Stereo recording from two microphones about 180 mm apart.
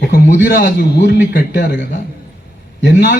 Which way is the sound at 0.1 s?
60° left (ahead or behind).